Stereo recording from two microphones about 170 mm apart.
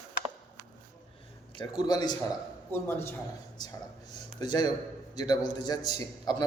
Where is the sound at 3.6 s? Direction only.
25° left (ahead or behind).